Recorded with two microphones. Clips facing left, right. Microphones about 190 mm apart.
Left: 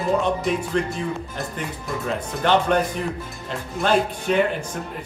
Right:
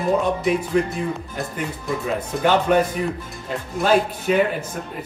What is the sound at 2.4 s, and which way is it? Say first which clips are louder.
Speech: right 1 dB; 5° right (ahead or behind).